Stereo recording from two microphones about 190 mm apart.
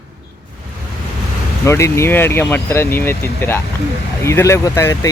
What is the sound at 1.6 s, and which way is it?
Speech, 15° left (ahead or behind).